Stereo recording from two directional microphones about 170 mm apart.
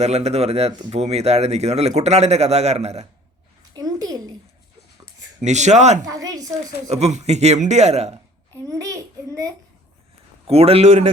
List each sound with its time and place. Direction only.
0.0 s a man's voice: 40° right (ahead or behind)
0.7 s a woman's voice: 25° right (ahead or behind)
0.9 s a man's voice: 40° right (ahead or behind)
3.8 s a sound: 20° right (ahead or behind)
5.4 s speech: 45° right (ahead or behind)
6.1 s a woman's voice: 20° right (ahead or behind)
6.9 s a man's voice: 40° right (ahead or behind)
8.6 s child singing: 20° right (ahead or behind)
10.4 s a man's voice: 35° right (ahead or behind)